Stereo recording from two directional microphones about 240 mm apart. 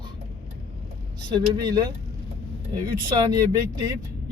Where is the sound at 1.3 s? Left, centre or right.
Centre.